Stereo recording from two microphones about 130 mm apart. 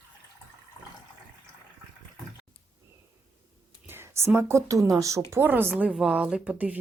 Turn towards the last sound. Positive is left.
turn(degrees=-10)  # may be behind; listen again after turning